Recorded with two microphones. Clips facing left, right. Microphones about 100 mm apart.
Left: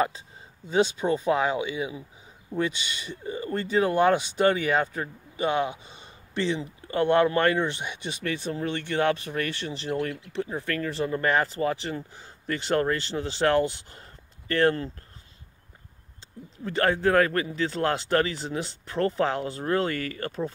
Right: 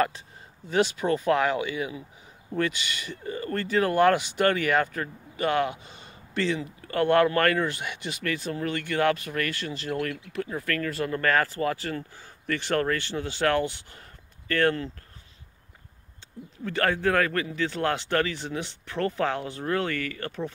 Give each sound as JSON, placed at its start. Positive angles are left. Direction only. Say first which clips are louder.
{"t": 1.0, "sound": "speech", "louder": "even", "side_deg": 15}
{"t": 16.6, "sound": "speech", "louder": "left 2 dB", "side_deg": 25}